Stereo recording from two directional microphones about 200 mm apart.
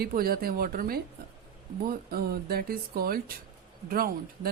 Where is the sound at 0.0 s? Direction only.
50° right (ahead or behind).